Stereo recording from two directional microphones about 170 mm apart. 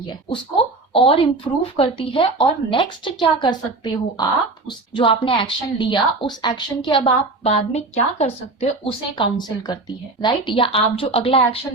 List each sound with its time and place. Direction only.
0.1 s a woman's voice: 30° left (ahead or behind)